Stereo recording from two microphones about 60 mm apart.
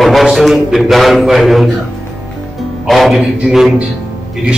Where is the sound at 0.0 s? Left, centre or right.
Centre.